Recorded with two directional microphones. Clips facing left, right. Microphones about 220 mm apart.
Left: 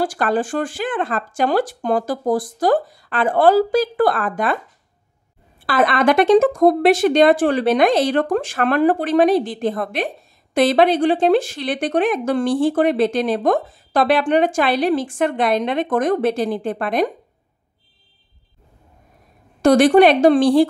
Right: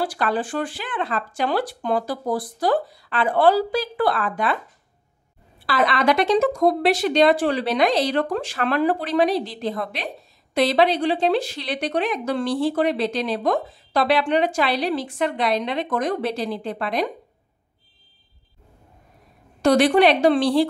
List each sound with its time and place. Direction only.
0.0 s a woman's voice: 45° left (ahead or behind)
5.7 s a woman's voice: 50° left (ahead or behind)
19.6 s a woman's voice: 45° left (ahead or behind)